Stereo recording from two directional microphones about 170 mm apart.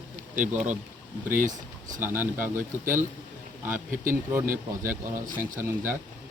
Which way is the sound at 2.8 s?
50° right (ahead or behind).